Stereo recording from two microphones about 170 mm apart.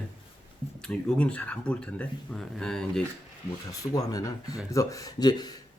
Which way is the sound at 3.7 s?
20° left (ahead or behind).